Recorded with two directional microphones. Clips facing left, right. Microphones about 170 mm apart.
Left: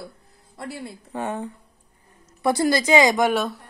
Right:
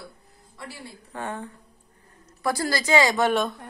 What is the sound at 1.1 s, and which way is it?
Speech, 15° left (ahead or behind).